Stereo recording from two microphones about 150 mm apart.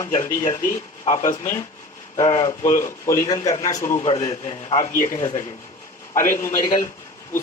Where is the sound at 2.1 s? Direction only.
25° left (ahead or behind).